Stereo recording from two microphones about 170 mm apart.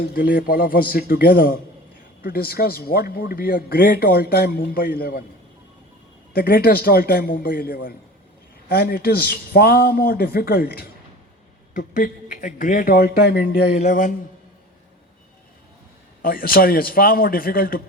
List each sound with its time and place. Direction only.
0.0 s speech: 60° left (ahead or behind)
6.3 s speech: 60° left (ahead or behind)
11.7 s speech: 50° left (ahead or behind); by 13.7 s 70° left (ahead or behind)
13.7 s a man's voice: 50° left (ahead or behind)
16.2 s speech: 60° left (ahead or behind)